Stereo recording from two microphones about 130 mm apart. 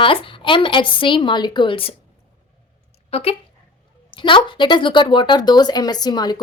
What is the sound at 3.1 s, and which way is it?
A woman's voice, 50° left (ahead or behind).